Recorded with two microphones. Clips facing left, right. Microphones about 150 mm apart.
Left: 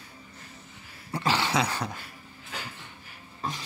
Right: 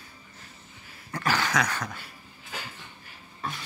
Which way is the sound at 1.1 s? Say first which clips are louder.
Left 1 dB; 25° left (ahead or behind).